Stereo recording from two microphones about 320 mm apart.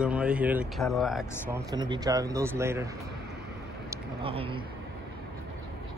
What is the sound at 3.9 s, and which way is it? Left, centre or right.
Speech, centre.